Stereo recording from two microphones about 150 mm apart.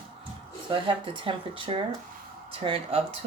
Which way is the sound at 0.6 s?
35° right (ahead or behind).